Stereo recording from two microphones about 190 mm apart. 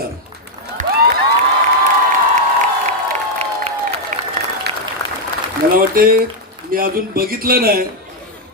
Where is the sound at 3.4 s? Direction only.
35° right (ahead or behind).